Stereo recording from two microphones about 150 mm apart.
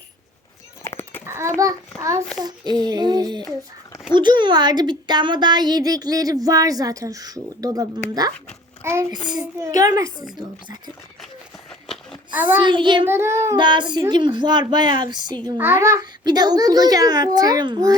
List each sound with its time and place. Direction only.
0.8 s a sound: 15° left (ahead or behind)
1.3 s a child's voice: 20° right (ahead or behind)
8.8 s child singing: 20° right (ahead or behind)
9.2 s a woman's voice: 25° right (ahead or behind)
12.3 s a child's voice: 10° right (ahead or behind)
12.5 s a child's voice: 30° right (ahead or behind)
13.1 s child singing: 15° right (ahead or behind)
13.6 s a child's voice: 30° right (ahead or behind)
15.5 s a woman's voice: 15° right (ahead or behind)